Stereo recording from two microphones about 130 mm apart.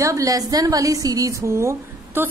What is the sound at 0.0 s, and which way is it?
A woman's voice, 25° right (ahead or behind).